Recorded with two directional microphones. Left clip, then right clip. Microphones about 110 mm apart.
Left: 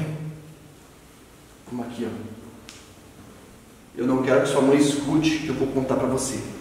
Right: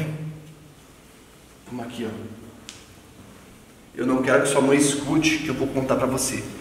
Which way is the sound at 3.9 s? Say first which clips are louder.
Even; 25° right (ahead or behind).